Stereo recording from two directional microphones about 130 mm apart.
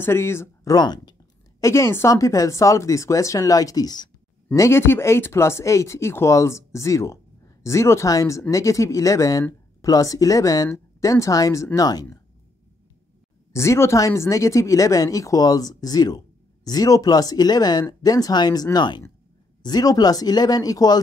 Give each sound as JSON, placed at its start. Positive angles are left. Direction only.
{"t": 0.0, "sound": "speech", "side_deg": 20}
{"t": 0.7, "sound": "speech", "side_deg": 30}
{"t": 1.6, "sound": "speech", "side_deg": 20}
{"t": 4.6, "sound": "speech", "side_deg": 20}
{"t": 13.5, "sound": "speech", "side_deg": 20}